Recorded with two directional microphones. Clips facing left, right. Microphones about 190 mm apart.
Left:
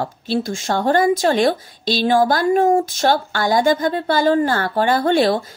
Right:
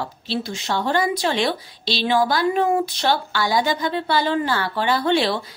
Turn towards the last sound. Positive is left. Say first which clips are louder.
# left 4 dB
turn(degrees=45)  # may be behind; listen again after turning